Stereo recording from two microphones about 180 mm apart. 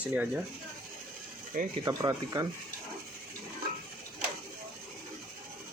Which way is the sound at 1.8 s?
20° right (ahead or behind).